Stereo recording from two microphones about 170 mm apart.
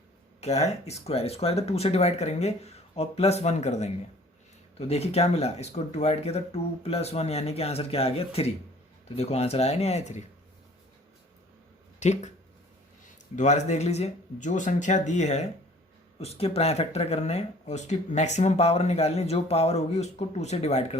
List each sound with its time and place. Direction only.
0.4 s speech: 40° left (ahead or behind)
11.9 s speech: 45° left (ahead or behind)
13.3 s speech: 45° left (ahead or behind)